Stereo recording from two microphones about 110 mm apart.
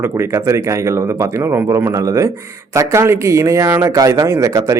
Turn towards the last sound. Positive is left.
turn(degrees=-30)  # may be behind; listen again after turning